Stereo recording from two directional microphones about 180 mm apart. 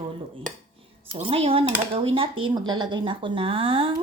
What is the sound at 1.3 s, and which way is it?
Cutlery, 30° right (ahead or behind).